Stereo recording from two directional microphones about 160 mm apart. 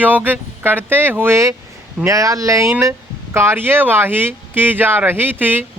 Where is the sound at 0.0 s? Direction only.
10° right (ahead or behind).